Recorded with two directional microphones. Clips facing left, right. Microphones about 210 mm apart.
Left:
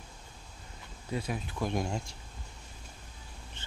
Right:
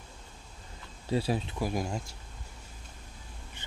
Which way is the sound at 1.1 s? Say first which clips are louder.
Right 6 dB; 30° right (ahead or behind).